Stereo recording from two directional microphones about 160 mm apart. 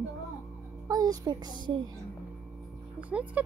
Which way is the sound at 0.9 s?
25° right (ahead or behind).